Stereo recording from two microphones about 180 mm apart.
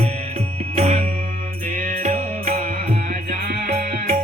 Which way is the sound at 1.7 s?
45° right (ahead or behind).